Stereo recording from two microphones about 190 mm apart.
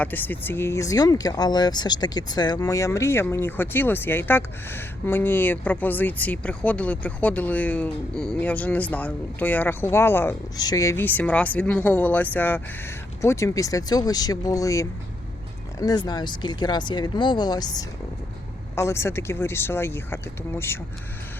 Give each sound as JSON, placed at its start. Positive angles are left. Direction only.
{"t": 0.0, "sound": "speech", "side_deg": 10}